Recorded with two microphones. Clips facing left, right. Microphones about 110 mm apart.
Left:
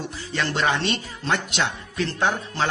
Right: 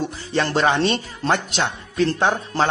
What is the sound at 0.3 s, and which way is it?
Speech, 35° right (ahead or behind).